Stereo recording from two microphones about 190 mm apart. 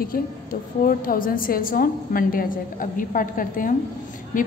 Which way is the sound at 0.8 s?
50° left (ahead or behind).